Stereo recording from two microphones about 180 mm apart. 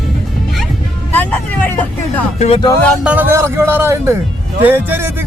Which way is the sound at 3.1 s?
10° right (ahead or behind).